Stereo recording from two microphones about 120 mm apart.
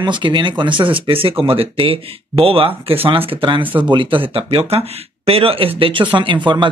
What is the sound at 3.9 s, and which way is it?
Speech, 45° right (ahead or behind).